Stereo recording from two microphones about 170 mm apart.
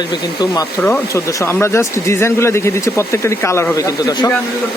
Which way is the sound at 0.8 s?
15° left (ahead or behind).